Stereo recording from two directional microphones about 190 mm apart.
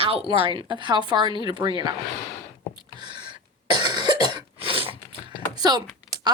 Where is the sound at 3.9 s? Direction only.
20° right (ahead or behind).